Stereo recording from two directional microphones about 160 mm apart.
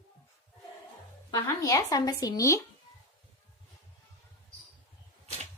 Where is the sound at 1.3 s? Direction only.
20° left (ahead or behind).